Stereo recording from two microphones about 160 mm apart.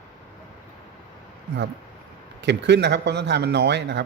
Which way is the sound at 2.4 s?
90° right.